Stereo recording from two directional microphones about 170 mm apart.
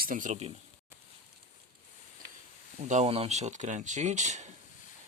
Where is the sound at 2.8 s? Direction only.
45° right (ahead or behind).